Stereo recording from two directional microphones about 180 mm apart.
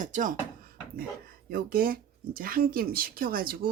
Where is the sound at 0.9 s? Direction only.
55° right (ahead or behind).